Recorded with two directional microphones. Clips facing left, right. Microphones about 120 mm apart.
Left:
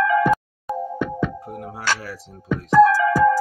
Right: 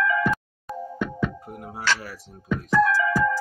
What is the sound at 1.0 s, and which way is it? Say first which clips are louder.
Music: left 3 dB; 70° left (ahead or behind).